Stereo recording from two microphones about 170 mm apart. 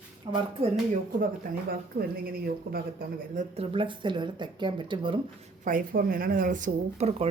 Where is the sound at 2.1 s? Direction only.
60° right (ahead or behind).